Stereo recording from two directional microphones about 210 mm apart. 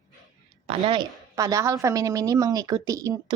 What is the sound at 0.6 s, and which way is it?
A woman's voice, 25° right (ahead or behind).